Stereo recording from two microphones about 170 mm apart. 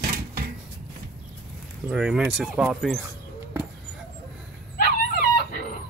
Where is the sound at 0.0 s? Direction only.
60° right (ahead or behind).